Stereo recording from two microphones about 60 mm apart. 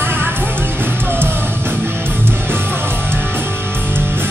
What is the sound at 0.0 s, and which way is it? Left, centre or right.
Music, right.